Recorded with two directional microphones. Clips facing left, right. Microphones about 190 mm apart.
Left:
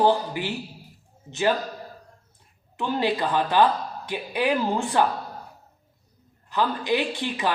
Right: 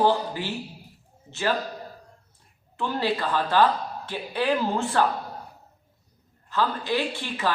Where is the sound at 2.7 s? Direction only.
20° left (ahead or behind).